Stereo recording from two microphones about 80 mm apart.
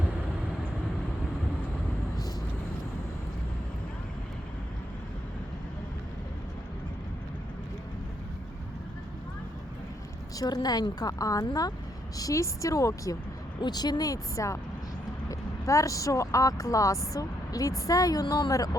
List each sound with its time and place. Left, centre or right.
10.3 s speech: left
13.6 s a woman's voice: left